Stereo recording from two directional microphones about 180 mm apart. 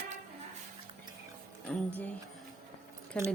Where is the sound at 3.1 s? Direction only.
5° left (ahead or behind).